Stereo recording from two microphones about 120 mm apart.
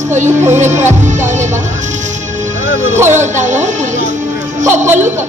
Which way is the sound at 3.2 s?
85° right.